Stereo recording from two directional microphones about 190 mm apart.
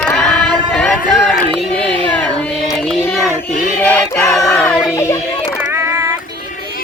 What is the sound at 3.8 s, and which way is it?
Choir, 5° left (ahead or behind).